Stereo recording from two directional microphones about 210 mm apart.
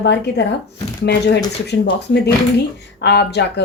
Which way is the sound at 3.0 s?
50° left (ahead or behind).